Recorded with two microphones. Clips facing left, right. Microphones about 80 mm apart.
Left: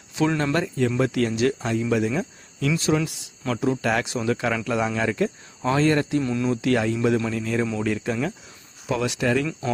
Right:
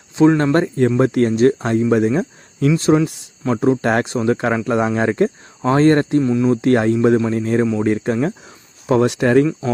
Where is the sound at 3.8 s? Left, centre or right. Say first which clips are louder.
Right 6 dB; right.